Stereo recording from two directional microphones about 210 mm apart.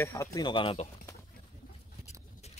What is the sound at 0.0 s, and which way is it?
Speech, 15° left (ahead or behind).